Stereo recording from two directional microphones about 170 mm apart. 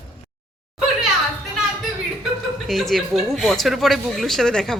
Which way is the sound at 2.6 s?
Centre (ahead or behind).